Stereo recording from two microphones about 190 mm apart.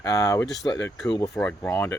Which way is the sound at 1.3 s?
10° left (ahead or behind).